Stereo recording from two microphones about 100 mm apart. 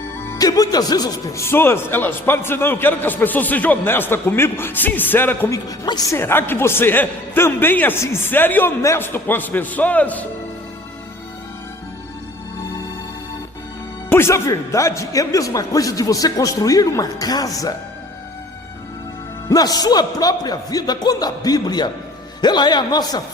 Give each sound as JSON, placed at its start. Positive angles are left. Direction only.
{"t": 0.3, "sound": "a man's voice", "side_deg": 40}
{"t": 1.4, "sound": "a man's voice", "side_deg": 25}
{"t": 5.5, "sound": "a man's voice", "side_deg": 40}
{"t": 6.1, "sound": "a man's voice", "side_deg": 25}
{"t": 14.1, "sound": "a man's voice", "side_deg": 25}
{"t": 19.5, "sound": "a man's voice", "side_deg": 40}